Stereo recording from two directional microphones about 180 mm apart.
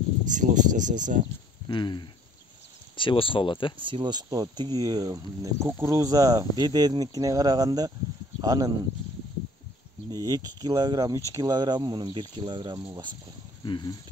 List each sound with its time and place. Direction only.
0.3 s speech: 45° right (ahead or behind)
1.7 s speech: 25° left (ahead or behind)
3.8 s speech: 25° right (ahead or behind)
10.1 s speech: 20° right (ahead or behind)
13.7 s speech: 25° left (ahead or behind)